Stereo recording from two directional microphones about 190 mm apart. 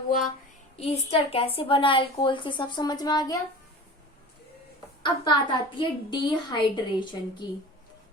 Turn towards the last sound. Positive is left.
turn(degrees=25)  # may be behind; listen again after turning